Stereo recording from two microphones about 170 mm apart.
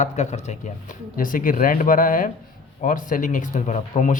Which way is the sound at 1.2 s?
55° left (ahead or behind).